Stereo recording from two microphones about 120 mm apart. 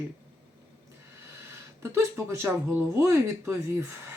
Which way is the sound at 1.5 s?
25° right (ahead or behind).